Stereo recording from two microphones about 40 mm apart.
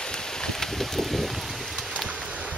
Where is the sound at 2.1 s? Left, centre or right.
Right.